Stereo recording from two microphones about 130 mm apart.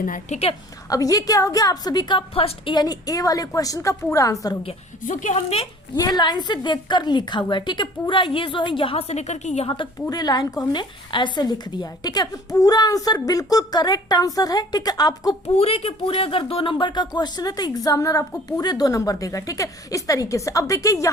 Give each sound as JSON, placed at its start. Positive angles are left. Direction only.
{"t": 0.0, "sound": "a woman's voice", "side_deg": 90}
{"t": 0.9, "sound": "speech", "side_deg": 25}
{"t": 5.0, "sound": "a woman's voice", "side_deg": 75}
{"t": 6.0, "sound": "a woman's voice", "side_deg": 35}
{"t": 9.6, "sound": "a woman's voice", "side_deg": 40}
{"t": 15.4, "sound": "speech", "side_deg": 50}